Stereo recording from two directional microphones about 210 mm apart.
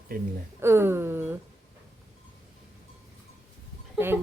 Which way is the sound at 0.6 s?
10° right (ahead or behind).